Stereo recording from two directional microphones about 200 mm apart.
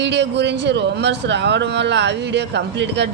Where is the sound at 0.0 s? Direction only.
60° right (ahead or behind).